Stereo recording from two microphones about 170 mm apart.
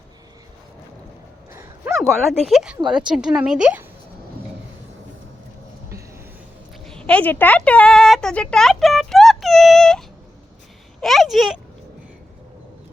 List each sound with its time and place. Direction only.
1.5 s a sound: 15° right (ahead or behind)
2.0 s speech: centre (ahead or behind)
6.8 s speech: 5° left (ahead or behind)
11.0 s speech: centre (ahead or behind)